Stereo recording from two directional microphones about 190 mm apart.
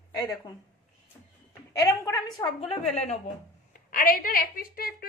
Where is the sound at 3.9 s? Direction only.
50° left (ahead or behind).